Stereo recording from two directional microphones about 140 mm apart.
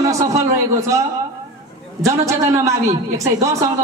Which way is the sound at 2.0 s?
20° right (ahead or behind).